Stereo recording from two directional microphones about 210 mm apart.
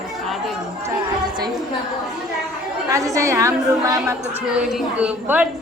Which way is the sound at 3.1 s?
15° right (ahead or behind).